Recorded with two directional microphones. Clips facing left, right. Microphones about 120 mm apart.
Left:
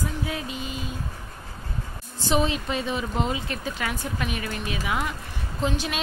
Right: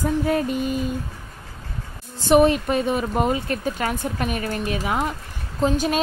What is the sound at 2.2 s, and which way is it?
A woman's voice, 55° right (ahead or behind).